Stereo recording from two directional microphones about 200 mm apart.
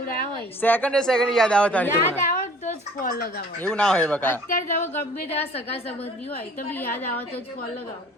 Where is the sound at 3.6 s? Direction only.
5° left (ahead or behind).